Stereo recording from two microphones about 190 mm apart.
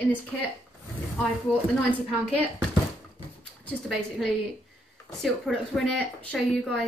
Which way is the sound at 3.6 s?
5° left (ahead or behind).